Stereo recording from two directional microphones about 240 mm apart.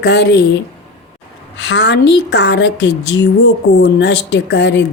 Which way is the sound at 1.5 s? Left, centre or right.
Left.